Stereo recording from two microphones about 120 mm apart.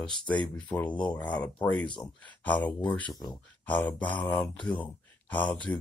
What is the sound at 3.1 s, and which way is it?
Speech, 35° left (ahead or behind).